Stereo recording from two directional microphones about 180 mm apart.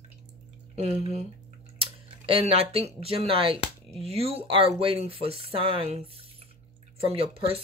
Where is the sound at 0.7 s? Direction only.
35° right (ahead or behind).